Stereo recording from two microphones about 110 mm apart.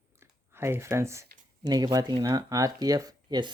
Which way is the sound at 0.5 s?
20° right (ahead or behind).